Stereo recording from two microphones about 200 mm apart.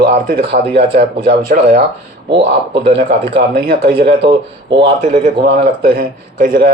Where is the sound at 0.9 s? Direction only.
45° right (ahead or behind).